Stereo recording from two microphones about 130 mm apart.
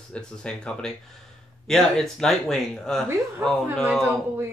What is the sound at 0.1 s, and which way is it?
Speech, 5° left (ahead or behind).